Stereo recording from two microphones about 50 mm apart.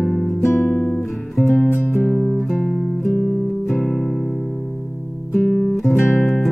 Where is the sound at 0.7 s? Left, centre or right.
Centre.